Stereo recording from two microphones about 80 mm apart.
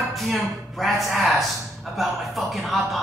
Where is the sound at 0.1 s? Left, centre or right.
Centre.